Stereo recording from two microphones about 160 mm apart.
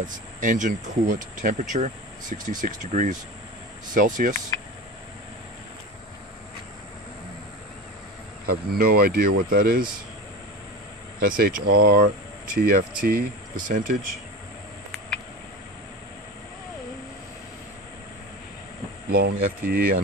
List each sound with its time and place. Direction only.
0.0 s speech: 55° right (ahead or behind)
8.5 s speech: 70° right (ahead or behind)
11.1 s speech: 65° right (ahead or behind)
19.0 s speech: 75° right (ahead or behind)